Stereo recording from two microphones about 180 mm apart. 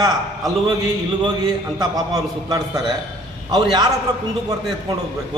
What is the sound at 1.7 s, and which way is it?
Speech, 20° right (ahead or behind).